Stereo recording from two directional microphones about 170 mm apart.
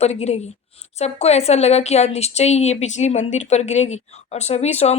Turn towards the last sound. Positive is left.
turn(degrees=40)  # may be behind; listen again after turning